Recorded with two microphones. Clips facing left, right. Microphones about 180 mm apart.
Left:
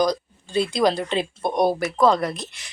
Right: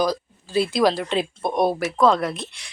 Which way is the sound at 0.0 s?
5° right (ahead or behind).